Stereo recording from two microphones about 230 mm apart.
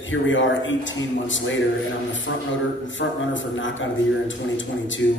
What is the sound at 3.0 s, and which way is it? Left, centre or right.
A man's voice, left.